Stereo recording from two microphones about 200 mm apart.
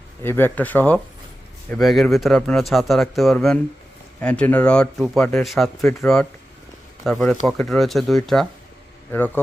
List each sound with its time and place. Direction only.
0.2 s speech: 10° left (ahead or behind)